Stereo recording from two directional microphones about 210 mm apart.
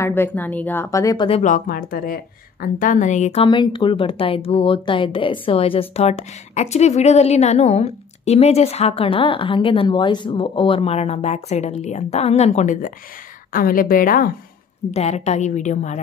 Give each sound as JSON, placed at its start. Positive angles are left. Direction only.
{"t": 0.0, "sound": "a woman's voice", "side_deg": 10}
{"t": 1.4, "sound": "a woman's voice", "side_deg": 40}
{"t": 14.9, "sound": "a woman's voice", "side_deg": 30}